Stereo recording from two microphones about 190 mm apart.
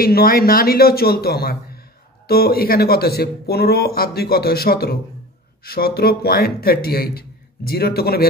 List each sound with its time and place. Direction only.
0.0 s speech: 50° left (ahead or behind)